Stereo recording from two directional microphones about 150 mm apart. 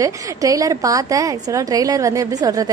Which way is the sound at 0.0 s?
25° right (ahead or behind).